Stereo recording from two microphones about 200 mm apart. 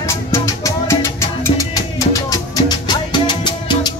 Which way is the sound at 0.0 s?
15° left (ahead or behind).